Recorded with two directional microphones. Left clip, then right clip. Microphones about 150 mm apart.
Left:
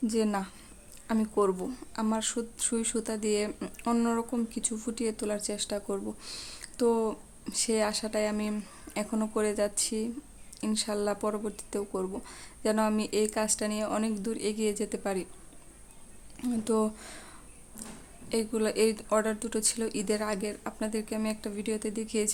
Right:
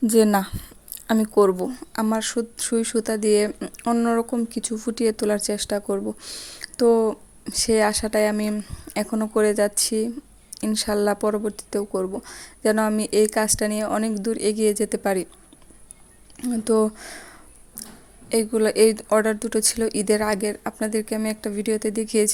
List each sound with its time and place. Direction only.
0.1 s speech: 50° right (ahead or behind)
3.6 s speech: 30° right (ahead or behind)
4.2 s speech: 35° right (ahead or behind)
8.5 s speech: 30° right (ahead or behind)
16.4 s speech: 30° right (ahead or behind)